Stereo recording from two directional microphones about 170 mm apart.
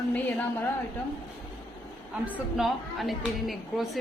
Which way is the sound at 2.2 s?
5° right (ahead or behind).